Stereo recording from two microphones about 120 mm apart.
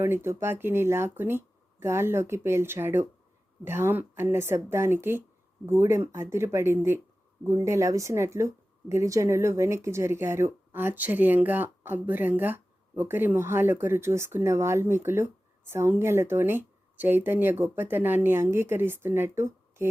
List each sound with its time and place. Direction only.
0.0 s speech: 20° right (ahead or behind)